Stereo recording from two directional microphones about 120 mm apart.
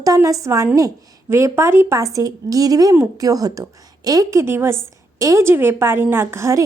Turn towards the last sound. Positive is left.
turn(degrees=-25)  # may be behind; listen again after turning